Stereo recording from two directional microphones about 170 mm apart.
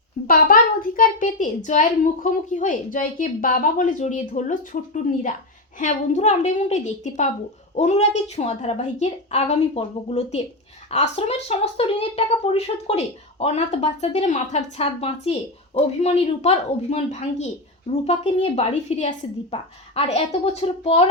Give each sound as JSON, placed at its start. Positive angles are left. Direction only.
{"t": 0.3, "sound": "a child's voice", "side_deg": 60}